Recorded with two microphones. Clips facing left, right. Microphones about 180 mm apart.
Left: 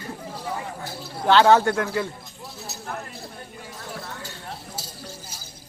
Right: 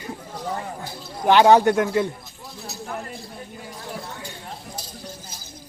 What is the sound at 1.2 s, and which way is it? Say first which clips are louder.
Speech: right 2 dB; 15° right (ahead or behind).